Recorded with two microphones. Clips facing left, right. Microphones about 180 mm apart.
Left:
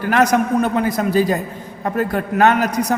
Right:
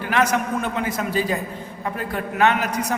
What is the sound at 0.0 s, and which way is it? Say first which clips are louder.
A man's voice: left 5 dB; 40° left (ahead or behind).